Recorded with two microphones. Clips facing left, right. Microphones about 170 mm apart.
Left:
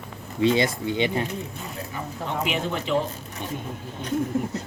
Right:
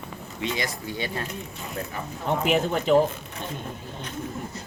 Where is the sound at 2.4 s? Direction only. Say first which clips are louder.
Right 6 dB; 45° right (ahead or behind).